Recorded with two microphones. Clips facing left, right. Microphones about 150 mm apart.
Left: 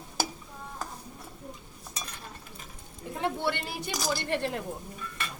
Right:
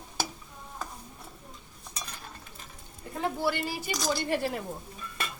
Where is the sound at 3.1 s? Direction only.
Centre (ahead or behind).